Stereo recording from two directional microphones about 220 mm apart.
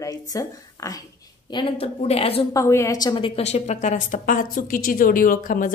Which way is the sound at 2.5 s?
15° left (ahead or behind).